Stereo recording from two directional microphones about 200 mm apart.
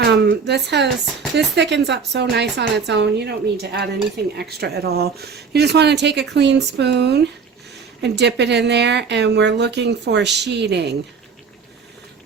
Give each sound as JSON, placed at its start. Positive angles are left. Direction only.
{"t": 0.0, "sound": "speech", "side_deg": -60}